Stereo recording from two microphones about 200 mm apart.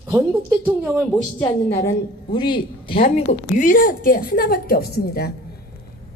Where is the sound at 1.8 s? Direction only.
20° left (ahead or behind); by 5.3 s 50° left (ahead or behind).